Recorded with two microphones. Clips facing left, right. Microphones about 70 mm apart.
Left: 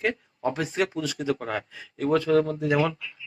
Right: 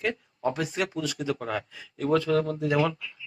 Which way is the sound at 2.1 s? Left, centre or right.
Centre.